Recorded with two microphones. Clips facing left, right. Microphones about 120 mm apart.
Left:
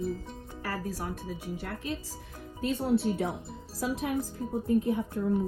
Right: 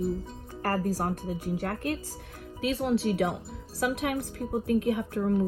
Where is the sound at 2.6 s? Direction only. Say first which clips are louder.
Even; 90° right.